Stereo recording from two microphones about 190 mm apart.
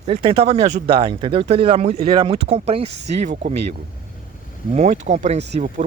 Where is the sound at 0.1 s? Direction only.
30° right (ahead or behind).